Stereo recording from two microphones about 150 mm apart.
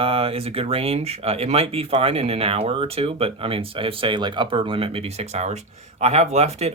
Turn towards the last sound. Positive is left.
turn(degrees=-45)  # may be behind; listen again after turning